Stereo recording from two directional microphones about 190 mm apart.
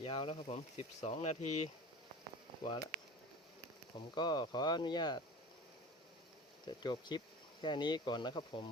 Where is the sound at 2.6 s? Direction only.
20° left (ahead or behind).